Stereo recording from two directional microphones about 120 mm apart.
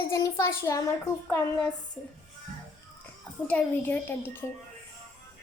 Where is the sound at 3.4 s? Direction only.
15° left (ahead or behind).